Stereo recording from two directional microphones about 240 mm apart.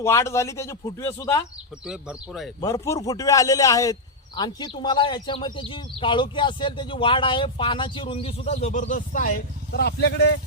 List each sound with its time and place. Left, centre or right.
0.0 s speech: centre
1.9 s speech: centre
2.6 s speech: centre; by 10.2 s left